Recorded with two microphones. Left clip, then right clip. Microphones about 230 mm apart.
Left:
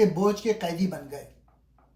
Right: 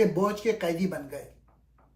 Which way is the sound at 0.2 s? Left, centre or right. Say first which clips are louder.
Left 1 dB; centre.